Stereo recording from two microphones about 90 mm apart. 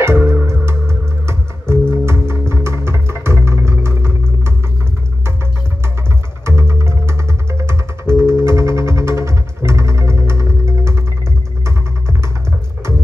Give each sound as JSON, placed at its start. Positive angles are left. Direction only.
{"t": 0.0, "sound": "music", "side_deg": -30}
{"t": 6.4, "sound": "music", "side_deg": -30}